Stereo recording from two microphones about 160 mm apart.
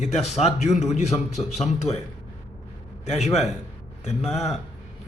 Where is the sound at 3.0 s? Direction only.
45° left (ahead or behind).